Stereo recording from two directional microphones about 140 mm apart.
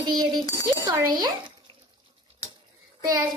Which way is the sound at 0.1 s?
30° right (ahead or behind).